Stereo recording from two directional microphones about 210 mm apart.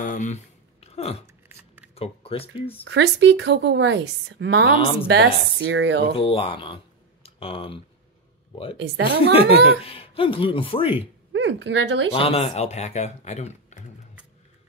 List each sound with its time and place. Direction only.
0.0 s a sound: 35° left (ahead or behind)
2.9 s a woman's voice: 55° right (ahead or behind)
6.1 s speech: 25° left (ahead or behind)
8.7 s a woman's voice: 60° right (ahead or behind)
9.2 s speech: 25° left (ahead or behind)
11.3 s a woman's voice: 60° right (ahead or behind)
12.1 s speech: 25° left (ahead or behind)